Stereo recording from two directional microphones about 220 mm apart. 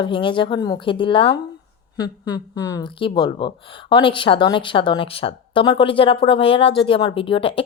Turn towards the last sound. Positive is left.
turn(degrees=25)  # may be behind; listen again after turning